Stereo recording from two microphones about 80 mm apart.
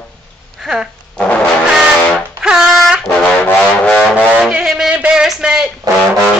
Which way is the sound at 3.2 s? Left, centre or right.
Centre.